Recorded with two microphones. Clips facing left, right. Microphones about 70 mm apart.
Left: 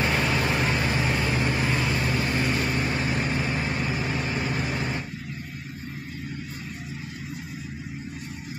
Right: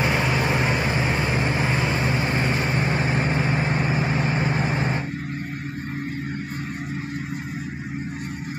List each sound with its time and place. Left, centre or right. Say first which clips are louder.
0.0 s vehicle: right 2 dB; centre